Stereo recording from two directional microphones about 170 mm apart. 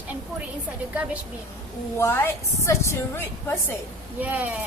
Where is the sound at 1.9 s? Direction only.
15° left (ahead or behind).